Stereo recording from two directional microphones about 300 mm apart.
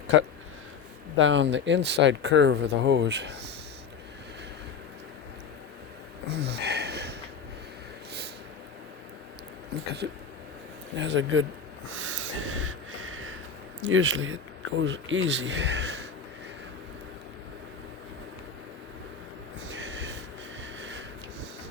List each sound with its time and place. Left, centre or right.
1.2 s speech: right
6.2 s a sound: right
10.0 s speech: right
11.9 s snort: right
13.8 s speech: right
19.7 s snort: right
20.7 s sniff: right